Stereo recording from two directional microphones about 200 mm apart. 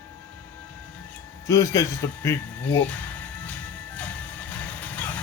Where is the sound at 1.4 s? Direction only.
15° left (ahead or behind).